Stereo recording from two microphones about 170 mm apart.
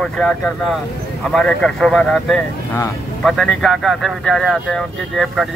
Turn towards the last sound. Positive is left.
turn(degrees=0)  # may be behind; listen again after turning